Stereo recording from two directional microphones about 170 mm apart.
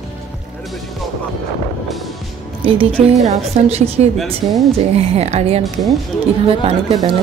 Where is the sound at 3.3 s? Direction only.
40° right (ahead or behind).